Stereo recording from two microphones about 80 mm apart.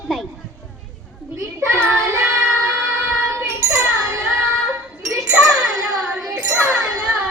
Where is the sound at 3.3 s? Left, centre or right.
Right.